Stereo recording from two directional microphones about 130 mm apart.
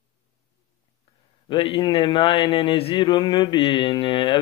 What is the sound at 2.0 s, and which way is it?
A man's voice, 40° left (ahead or behind).